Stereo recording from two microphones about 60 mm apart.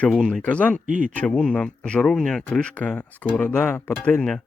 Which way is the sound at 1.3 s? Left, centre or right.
Centre.